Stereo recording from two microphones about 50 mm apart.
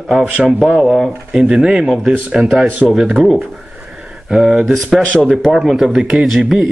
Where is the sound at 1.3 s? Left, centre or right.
Centre.